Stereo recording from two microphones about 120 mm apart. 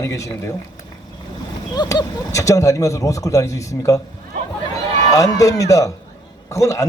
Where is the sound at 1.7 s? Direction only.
35° left (ahead or behind).